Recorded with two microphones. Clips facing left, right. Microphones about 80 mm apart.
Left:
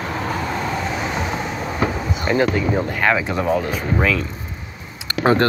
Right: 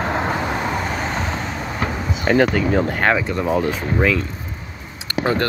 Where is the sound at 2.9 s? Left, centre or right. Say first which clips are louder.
Right 1 dB; right.